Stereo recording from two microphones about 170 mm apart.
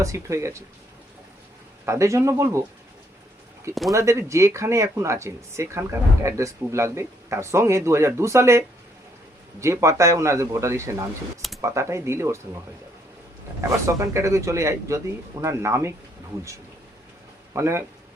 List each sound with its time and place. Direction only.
0.0 s speech: 20° right (ahead or behind)
1.8 s speech: 15° right (ahead or behind)
3.9 s speech: 15° right (ahead or behind)
13.6 s speech: 15° right (ahead or behind)
17.5 s speech: 15° right (ahead or behind)